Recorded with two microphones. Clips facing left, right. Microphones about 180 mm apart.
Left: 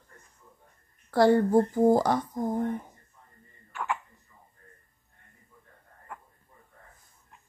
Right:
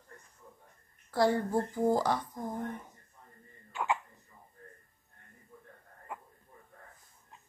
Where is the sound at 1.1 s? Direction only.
70° left (ahead or behind).